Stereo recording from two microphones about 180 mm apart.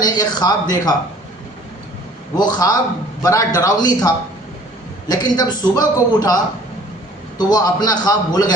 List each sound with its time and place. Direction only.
0.0 s a man's voice: 20° left (ahead or behind)
2.3 s a man's voice: 25° left (ahead or behind)